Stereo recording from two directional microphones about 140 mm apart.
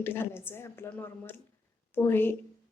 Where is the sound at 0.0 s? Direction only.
15° left (ahead or behind).